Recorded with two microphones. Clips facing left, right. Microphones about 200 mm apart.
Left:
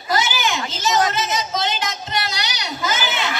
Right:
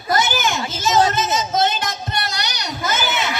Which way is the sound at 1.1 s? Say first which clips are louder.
Right 2 dB; 50° right (ahead or behind).